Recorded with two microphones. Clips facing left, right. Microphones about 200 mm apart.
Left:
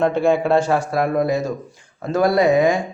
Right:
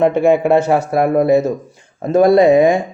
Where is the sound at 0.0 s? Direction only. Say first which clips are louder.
Right 5 dB; 20° right (ahead or behind).